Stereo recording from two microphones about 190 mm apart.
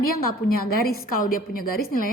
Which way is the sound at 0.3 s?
50° left (ahead or behind).